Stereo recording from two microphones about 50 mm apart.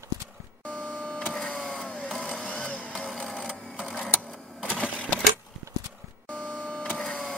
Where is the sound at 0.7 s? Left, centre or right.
Left.